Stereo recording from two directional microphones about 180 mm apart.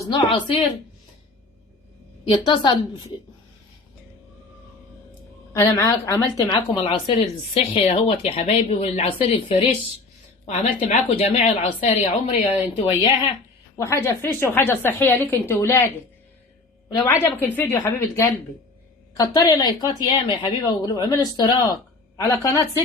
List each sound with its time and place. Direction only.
0.0 s speech: 25° left (ahead or behind)
2.3 s speech: 25° left (ahead or behind)
5.5 s a woman's voice: 20° left (ahead or behind)
6.7 s speech: 30° left (ahead or behind)
10.4 s speech: 45° left (ahead or behind)
13.7 s a woman's voice: 15° left (ahead or behind)
17.1 s a woman's voice: 10° left (ahead or behind)